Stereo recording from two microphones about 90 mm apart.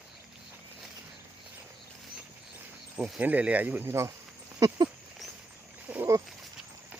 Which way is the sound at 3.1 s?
15° right (ahead or behind).